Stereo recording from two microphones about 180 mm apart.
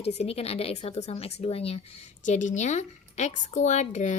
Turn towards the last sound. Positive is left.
turn(degrees=40)  # may be behind; listen again after turning